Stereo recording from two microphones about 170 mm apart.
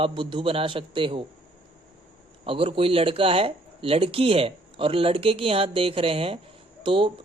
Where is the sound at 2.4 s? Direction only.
30° right (ahead or behind).